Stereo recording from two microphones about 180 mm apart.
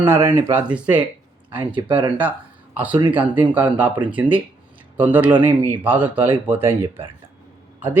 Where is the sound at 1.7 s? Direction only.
30° right (ahead or behind).